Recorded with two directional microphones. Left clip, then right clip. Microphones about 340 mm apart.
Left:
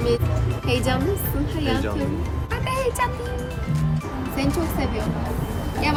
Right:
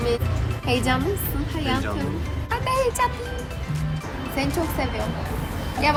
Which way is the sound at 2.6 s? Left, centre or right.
Centre.